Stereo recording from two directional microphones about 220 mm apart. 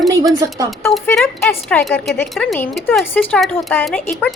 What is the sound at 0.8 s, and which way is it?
A woman's voice, 10° left (ahead or behind).